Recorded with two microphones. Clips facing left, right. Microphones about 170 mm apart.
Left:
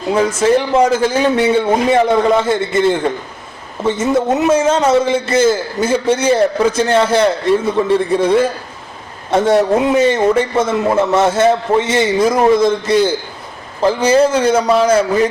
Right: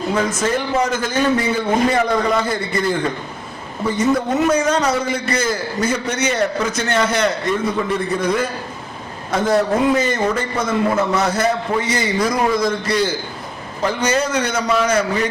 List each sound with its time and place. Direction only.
0.3 s a man's voice: 30° left (ahead or behind)